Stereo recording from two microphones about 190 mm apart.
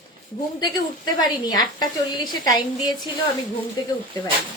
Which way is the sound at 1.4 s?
20° left (ahead or behind).